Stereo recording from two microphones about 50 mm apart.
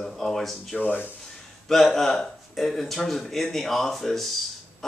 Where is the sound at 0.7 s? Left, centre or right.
Left.